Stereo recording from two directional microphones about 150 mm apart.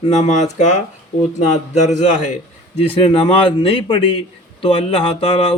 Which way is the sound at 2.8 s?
40° left (ahead or behind).